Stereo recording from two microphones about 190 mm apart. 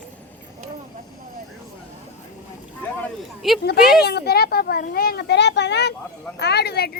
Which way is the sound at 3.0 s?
Centre (ahead or behind).